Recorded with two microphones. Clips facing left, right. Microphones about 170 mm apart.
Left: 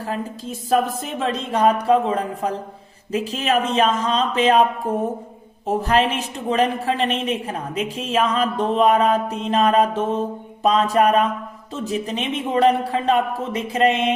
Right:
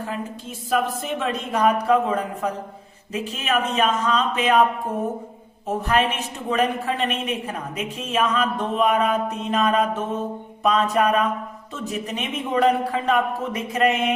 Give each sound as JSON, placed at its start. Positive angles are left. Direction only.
{"t": 0.0, "sound": "a woman's voice", "side_deg": 35}
{"t": 5.6, "sound": "a woman's voice", "side_deg": 35}